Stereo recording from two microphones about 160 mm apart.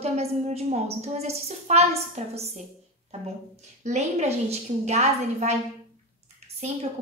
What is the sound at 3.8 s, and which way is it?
A woman's voice, 45° right (ahead or behind).